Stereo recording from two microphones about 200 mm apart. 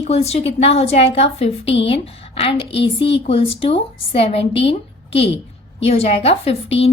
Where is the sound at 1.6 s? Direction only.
65° left (ahead or behind).